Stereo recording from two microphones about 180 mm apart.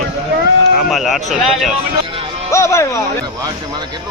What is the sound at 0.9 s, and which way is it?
Speech, centre (ahead or behind).